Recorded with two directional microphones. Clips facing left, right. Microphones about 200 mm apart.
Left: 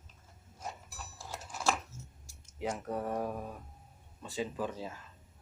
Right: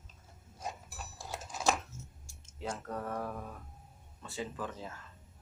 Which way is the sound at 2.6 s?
15° left (ahead or behind).